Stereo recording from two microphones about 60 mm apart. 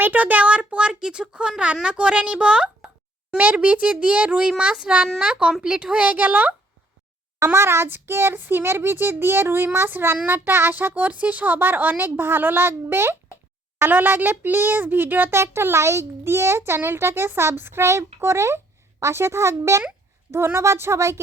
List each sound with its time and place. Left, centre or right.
0.0 s a child's voice: right
7.3 s a child's voice: right
15.4 s a child's voice: right